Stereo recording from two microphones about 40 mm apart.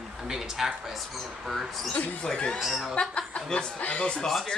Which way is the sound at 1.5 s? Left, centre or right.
Centre.